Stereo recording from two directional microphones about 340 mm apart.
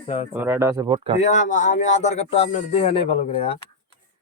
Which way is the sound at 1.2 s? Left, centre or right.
Left.